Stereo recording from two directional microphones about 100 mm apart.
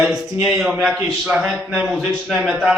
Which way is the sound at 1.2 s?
5° right (ahead or behind).